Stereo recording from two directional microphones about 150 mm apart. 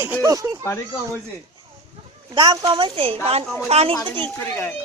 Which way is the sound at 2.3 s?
30° right (ahead or behind).